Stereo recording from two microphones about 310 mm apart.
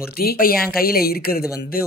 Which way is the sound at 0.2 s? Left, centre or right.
Left.